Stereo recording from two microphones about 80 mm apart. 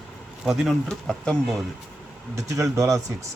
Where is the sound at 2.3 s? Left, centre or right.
Right.